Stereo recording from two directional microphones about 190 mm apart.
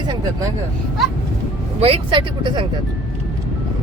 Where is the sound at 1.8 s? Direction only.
30° right (ahead or behind).